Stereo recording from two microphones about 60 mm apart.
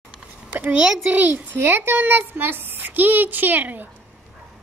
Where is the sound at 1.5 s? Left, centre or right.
Right.